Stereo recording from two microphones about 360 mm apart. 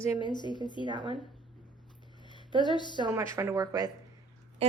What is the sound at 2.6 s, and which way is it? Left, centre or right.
Speech, centre.